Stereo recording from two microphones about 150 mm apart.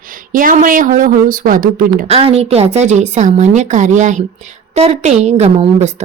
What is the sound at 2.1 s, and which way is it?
A woman's voice, 40° right (ahead or behind).